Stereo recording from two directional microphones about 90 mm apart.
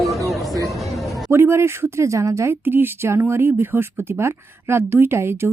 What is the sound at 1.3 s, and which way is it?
Speech, 30° right (ahead or behind).